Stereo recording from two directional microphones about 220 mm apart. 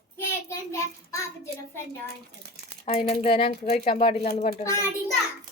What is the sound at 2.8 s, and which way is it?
A child's voice, 30° left (ahead or behind).